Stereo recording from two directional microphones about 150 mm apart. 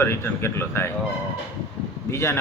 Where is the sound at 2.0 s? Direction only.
15° left (ahead or behind).